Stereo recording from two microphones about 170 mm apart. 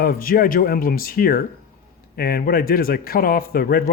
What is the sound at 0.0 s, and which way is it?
Speech, 60° left (ahead or behind).